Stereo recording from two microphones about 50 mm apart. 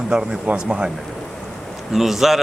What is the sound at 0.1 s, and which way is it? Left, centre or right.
Speech, centre.